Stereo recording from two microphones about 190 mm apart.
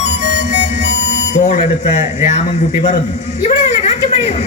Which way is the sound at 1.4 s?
40° left (ahead or behind).